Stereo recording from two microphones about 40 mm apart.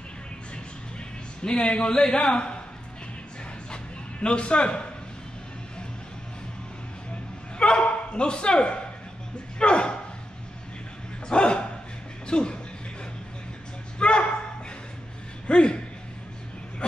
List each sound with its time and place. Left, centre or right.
1.4 s speech: centre
3.7 s dog: left
7.5 s dog: left
7.8 s speech: left
11.2 s speech: left
13.9 s a sound: left
15.4 s speech: left